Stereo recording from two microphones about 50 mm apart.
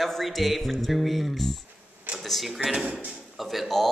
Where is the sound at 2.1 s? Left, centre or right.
Centre.